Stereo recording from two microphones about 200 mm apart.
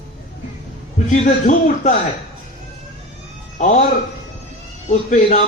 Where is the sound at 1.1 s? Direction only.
35° left (ahead or behind).